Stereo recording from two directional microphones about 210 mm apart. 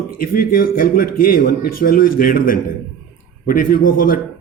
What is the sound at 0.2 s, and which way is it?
A man's voice, 45° left (ahead or behind).